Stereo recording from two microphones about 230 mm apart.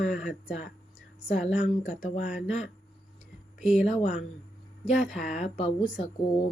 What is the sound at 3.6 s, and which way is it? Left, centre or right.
Speech, centre.